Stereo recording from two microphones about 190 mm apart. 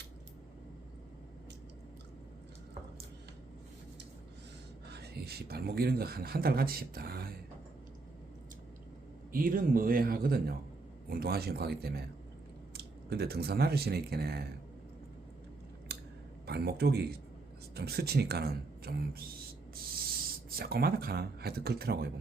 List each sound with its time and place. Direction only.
4.9 s speech: 60° right (ahead or behind)
9.3 s speech: 50° right (ahead or behind)
15.9 s scissors: 60° right (ahead or behind)
16.5 s speech: 60° right (ahead or behind)
20.6 s speech: 55° right (ahead or behind)